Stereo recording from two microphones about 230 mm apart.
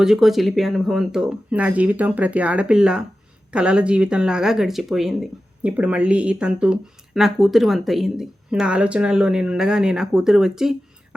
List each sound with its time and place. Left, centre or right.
0.0 s speech: centre